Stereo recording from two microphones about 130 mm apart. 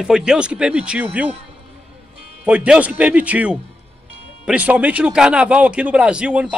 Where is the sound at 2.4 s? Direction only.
10° right (ahead or behind).